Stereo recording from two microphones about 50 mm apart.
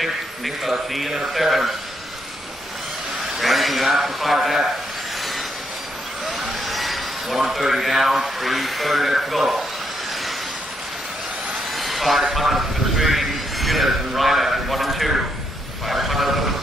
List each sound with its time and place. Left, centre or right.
0.7 s speech: centre
3.3 s speech: centre
6.4 s a man's voice: centre
11.7 s speech: centre
15.9 s vehicle: centre